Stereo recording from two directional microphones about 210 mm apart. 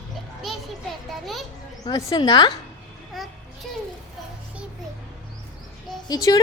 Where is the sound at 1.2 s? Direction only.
Centre (ahead or behind).